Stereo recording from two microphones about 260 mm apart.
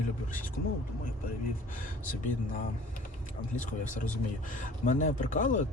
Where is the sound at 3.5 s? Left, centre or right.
Left.